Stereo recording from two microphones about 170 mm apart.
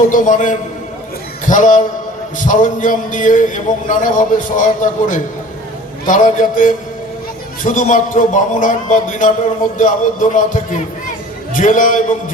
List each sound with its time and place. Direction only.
0.1 s a man's voice: 50° left (ahead or behind)